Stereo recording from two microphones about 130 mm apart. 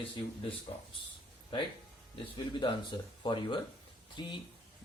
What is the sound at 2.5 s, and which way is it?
Speech, 40° left (ahead or behind).